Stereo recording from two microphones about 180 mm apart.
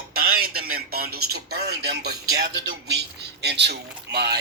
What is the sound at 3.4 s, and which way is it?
Speech, 70° right (ahead or behind).